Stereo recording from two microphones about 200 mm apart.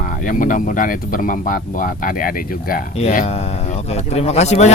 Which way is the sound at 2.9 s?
30° left (ahead or behind).